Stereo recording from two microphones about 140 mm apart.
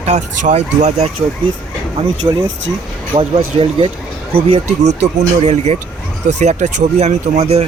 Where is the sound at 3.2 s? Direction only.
40° right (ahead or behind).